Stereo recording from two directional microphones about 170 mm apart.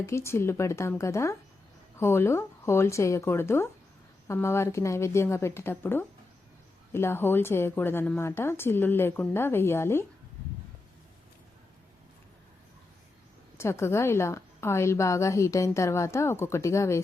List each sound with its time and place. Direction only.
0.0 s a woman's voice: 15° left (ahead or behind)
13.6 s a woman's voice: 15° left (ahead or behind)